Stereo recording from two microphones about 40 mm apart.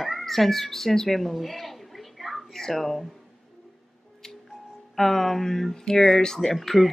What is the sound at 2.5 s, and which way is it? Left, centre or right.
Speech, centre.